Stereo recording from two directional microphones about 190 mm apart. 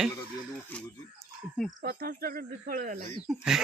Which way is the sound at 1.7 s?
50° right (ahead or behind).